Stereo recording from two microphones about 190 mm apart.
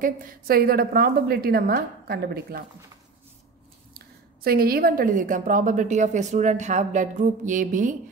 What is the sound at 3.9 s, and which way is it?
A woman's voice, 55° right (ahead or behind).